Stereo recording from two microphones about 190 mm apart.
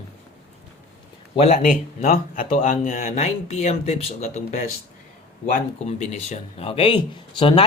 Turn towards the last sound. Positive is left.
turn(degrees=25)  # may be behind; listen again after turning